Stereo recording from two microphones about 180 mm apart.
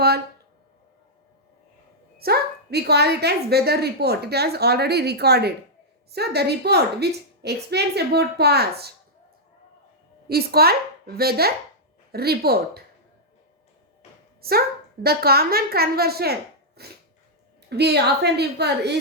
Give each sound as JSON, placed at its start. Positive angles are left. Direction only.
{"t": 2.1, "sound": "speech", "side_deg": -60}
{"t": 10.2, "sound": "speech", "side_deg": -60}
{"t": 15.0, "sound": "a woman's voice", "side_deg": -60}